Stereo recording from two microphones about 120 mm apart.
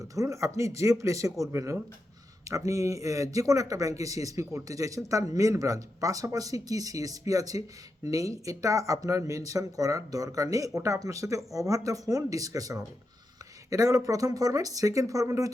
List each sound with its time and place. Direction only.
0.0 s speech: 30° right (ahead or behind)